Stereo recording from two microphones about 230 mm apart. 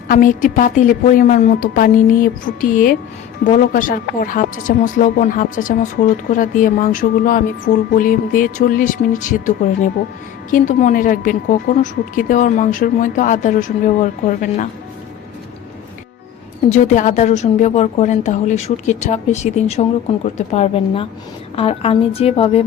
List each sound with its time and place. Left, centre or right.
0.1 s speech: left
10.5 s speech: left
16.6 s a woman's voice: left